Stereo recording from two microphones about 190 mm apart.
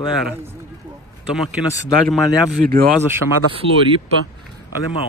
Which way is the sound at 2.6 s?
50° right (ahead or behind).